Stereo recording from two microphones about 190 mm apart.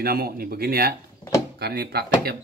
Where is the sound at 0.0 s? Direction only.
55° right (ahead or behind).